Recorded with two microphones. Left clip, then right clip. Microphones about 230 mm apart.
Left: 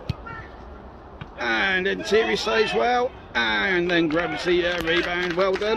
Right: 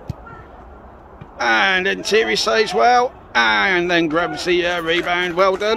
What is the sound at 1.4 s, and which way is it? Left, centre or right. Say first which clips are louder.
Speech: right 7 dB; right.